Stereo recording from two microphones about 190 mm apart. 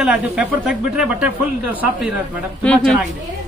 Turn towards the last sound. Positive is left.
turn(degrees=5)  # may be behind; listen again after turning